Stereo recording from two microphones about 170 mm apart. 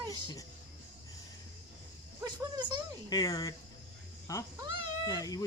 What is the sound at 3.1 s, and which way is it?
Speech, 20° left (ahead or behind).